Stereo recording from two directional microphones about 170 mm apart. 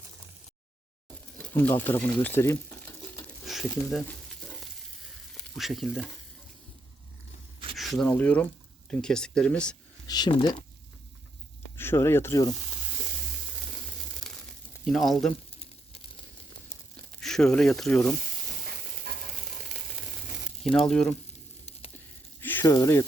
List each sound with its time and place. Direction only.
1.4 s a sound: 10° left (ahead or behind)
3.4 s a sound: centre (ahead or behind)
5.3 s frying: centre (ahead or behind)
7.8 s speech: centre (ahead or behind)
10.1 s speech: 25° left (ahead or behind)
11.8 s speech: 15° left (ahead or behind)
14.8 s speech: centre (ahead or behind)
15.9 s a sound: 35° left (ahead or behind)
17.2 s speech: 5° left (ahead or behind)
19.1 s sizzle: 70° right (ahead or behind)
19.6 s a sound: centre (ahead or behind)
20.7 s speech: centre (ahead or behind)
22.4 s speech: 10° left (ahead or behind)